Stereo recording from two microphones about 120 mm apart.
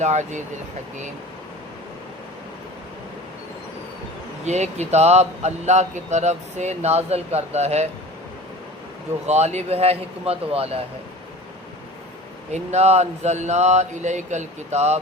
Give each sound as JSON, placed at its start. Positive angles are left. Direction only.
{"t": 0.0, "sound": "speech", "side_deg": -75}
{"t": 4.4, "sound": "speech", "side_deg": -70}
{"t": 9.2, "sound": "speech", "side_deg": -70}
{"t": 12.5, "sound": "speech", "side_deg": -65}